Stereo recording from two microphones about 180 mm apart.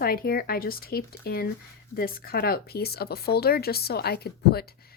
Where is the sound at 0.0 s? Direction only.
55° left (ahead or behind).